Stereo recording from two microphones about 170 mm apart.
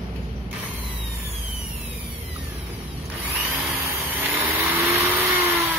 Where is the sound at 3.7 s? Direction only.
15° right (ahead or behind).